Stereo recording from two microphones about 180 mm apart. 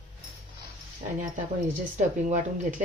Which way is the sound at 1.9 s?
45° right (ahead or behind).